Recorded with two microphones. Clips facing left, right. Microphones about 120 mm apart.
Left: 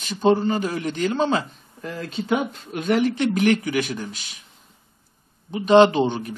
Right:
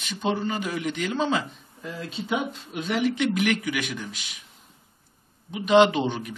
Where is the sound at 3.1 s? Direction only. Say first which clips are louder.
Left 4 dB; 40° left (ahead or behind).